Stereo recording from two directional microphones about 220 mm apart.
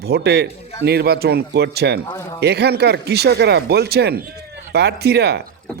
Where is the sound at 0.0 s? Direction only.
45° right (ahead or behind).